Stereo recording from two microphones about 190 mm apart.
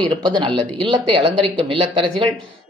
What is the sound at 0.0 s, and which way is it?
Speech, 25° right (ahead or behind).